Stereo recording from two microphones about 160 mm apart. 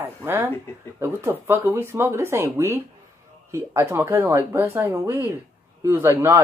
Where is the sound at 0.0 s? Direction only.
15° right (ahead or behind).